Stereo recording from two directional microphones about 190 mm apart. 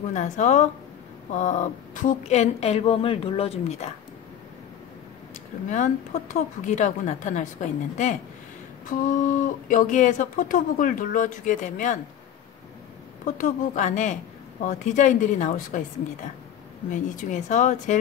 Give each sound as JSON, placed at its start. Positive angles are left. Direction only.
{"t": 0.1, "sound": "a woman's voice", "side_deg": 40}
{"t": 5.7, "sound": "a woman's voice", "side_deg": 40}
{"t": 8.9, "sound": "speech", "side_deg": 45}
{"t": 13.2, "sound": "a woman's voice", "side_deg": 40}
{"t": 16.9, "sound": "a woman's voice", "side_deg": 40}